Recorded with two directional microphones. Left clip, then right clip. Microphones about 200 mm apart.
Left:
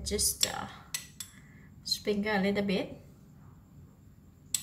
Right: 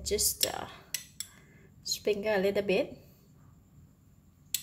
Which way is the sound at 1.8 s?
40° right (ahead or behind).